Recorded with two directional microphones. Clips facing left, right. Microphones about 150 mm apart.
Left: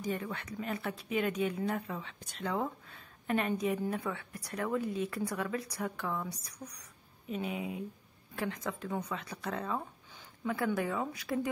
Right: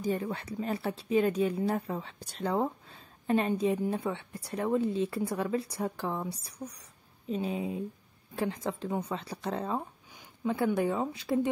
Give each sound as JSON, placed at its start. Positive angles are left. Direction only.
{"t": 0.0, "sound": "a woman's voice", "side_deg": -30}